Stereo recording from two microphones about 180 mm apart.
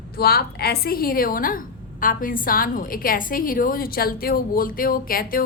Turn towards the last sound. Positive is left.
turn(degrees=55)  # may be behind; listen again after turning